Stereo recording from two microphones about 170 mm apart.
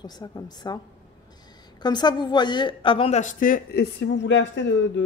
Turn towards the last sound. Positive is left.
turn(degrees=90)